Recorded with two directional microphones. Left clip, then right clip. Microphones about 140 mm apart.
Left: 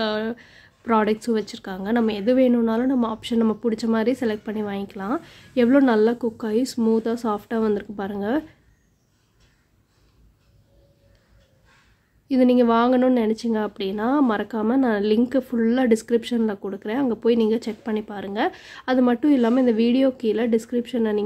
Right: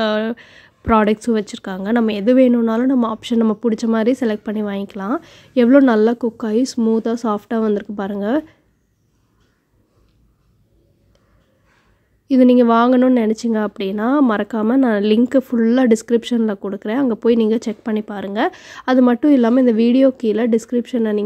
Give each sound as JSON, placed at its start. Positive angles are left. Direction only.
{"t": 0.0, "sound": "speech", "side_deg": -40}
{"t": 12.3, "sound": "speech", "side_deg": -40}